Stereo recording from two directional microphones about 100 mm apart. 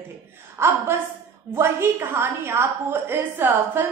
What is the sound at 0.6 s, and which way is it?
A woman's voice, 25° right (ahead or behind).